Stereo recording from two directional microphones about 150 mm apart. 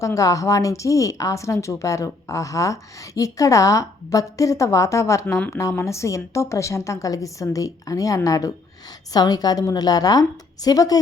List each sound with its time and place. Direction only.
0.0 s speech: 20° left (ahead or behind)